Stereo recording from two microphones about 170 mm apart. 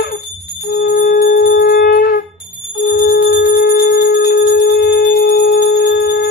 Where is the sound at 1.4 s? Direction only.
70° left (ahead or behind).